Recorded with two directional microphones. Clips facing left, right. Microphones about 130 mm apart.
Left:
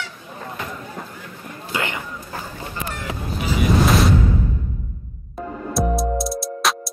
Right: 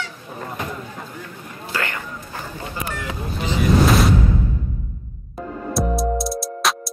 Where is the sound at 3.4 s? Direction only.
Centre (ahead or behind).